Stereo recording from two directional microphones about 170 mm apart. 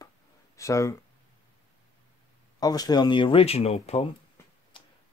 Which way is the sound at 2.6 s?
20° left (ahead or behind).